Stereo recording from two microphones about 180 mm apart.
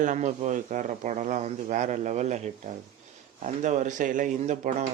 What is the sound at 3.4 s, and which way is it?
Speech, 40° right (ahead or behind).